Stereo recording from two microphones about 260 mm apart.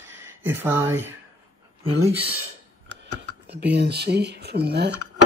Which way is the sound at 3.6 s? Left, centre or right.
Right.